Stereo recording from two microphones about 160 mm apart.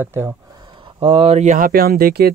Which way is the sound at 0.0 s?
15° right (ahead or behind).